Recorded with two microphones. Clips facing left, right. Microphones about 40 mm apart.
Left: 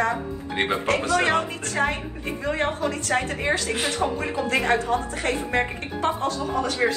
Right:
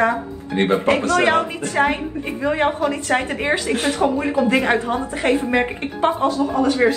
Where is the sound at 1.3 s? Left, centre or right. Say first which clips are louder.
Right 5 dB; right.